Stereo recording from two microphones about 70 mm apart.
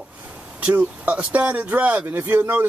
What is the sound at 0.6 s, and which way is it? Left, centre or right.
Speech, centre.